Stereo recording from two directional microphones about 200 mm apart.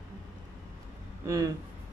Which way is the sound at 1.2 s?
15° right (ahead or behind).